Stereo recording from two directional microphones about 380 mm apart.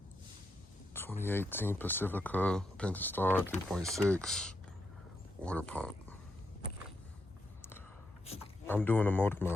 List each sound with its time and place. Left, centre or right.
0.9 s speech: centre
8.3 s speech: centre